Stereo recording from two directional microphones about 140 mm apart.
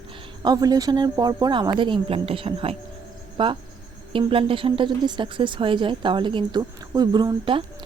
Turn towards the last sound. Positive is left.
turn(degrees=-35)  # may be behind; listen again after turning